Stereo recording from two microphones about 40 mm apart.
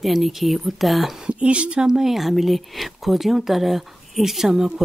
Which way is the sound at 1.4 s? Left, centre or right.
Right.